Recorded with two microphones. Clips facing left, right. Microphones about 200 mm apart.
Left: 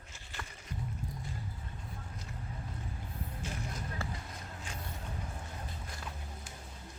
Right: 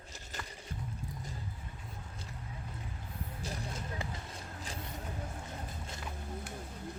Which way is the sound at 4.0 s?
15° right (ahead or behind).